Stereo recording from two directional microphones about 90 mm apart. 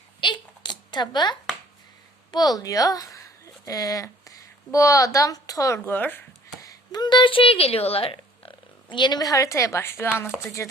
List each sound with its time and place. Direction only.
0.2 s a sound: 60° left (ahead or behind)
2.3 s speech: 45° left (ahead or behind); by 6.2 s 20° left (ahead or behind)
6.6 s speech: 45° left (ahead or behind); by 10.7 s 30° left (ahead or behind)